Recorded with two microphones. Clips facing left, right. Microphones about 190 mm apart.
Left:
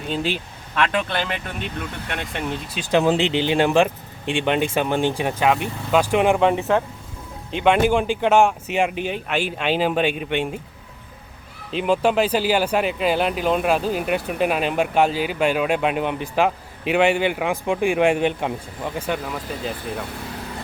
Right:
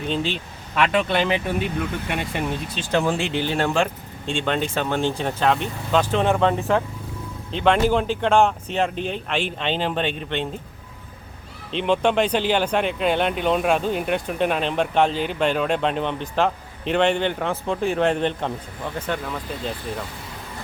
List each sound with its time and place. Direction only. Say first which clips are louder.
0.1 s speech: left 1 dB; 10° left (ahead or behind)
0.8 s speech: right 2 dB; 5° right (ahead or behind)
2.7 s speech: left 5 dB; 15° left (ahead or behind)
11.7 s speech: left 1 dB; 5° left (ahead or behind)